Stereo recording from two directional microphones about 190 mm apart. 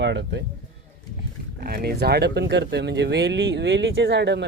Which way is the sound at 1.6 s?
55° right (ahead or behind).